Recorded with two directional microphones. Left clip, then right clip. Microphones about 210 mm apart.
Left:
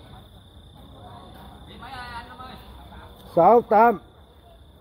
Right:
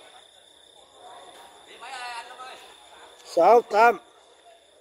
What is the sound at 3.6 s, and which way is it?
Speech, 10° right (ahead or behind).